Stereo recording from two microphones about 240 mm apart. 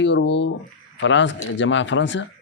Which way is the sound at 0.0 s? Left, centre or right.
Left.